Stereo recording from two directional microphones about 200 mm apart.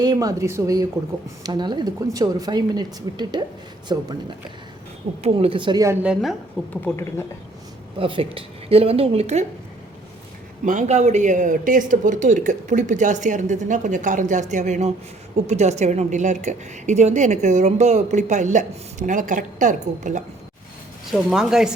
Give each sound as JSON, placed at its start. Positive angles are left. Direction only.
{"t": 0.0, "sound": "a woman's voice", "side_deg": -20}
{"t": 5.2, "sound": "a woman's voice", "side_deg": -30}
{"t": 6.8, "sound": "speech", "side_deg": 10}
{"t": 7.9, "sound": "a woman's voice", "side_deg": -25}
{"t": 10.7, "sound": "a woman's voice", "side_deg": -35}
{"t": 21.1, "sound": "speech", "side_deg": 0}